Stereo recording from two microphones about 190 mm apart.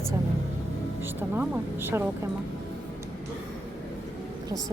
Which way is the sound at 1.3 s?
10° right (ahead or behind).